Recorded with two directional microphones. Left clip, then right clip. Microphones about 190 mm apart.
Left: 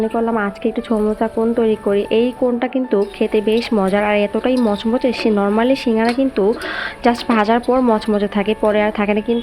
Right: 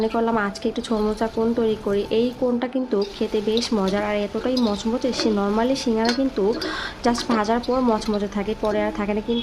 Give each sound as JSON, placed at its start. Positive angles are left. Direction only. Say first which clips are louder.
{"t": 0.2, "sound": "speech", "louder": "left 4 dB", "side_deg": 10}